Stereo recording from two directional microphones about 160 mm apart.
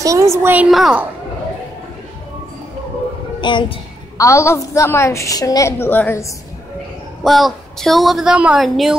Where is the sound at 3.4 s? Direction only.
30° left (ahead or behind).